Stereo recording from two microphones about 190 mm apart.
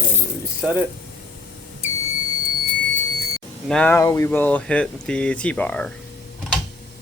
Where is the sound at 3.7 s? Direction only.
5° left (ahead or behind).